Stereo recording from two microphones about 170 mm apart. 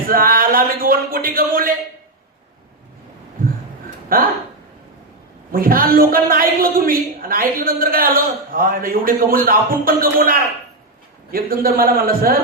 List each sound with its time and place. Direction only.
0.1 s a man's voice: 60° right (ahead or behind)
4.1 s a man's voice: 60° right (ahead or behind)
5.5 s a man's voice: 55° right (ahead or behind)